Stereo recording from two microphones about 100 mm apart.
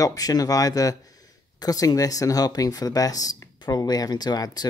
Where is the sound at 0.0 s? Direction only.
40° left (ahead or behind).